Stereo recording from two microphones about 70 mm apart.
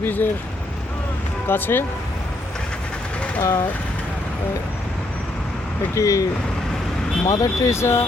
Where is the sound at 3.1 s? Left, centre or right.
Centre.